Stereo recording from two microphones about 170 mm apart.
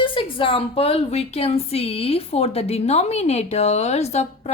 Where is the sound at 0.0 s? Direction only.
30° left (ahead or behind).